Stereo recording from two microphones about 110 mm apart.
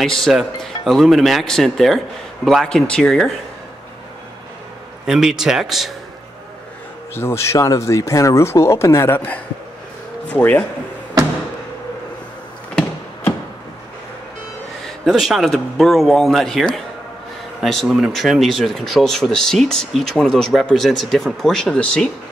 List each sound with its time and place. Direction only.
0.2 s speech: centre (ahead or behind)
5.0 s speech: 5° right (ahead or behind)
7.2 s speech: 25° left (ahead or behind)
15.0 s speech: centre (ahead or behind)